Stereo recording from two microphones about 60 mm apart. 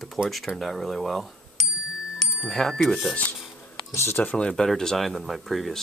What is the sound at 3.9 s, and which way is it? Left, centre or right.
Speech, left.